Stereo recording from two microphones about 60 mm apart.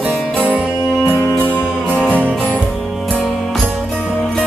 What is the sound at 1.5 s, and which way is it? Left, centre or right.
Music, left.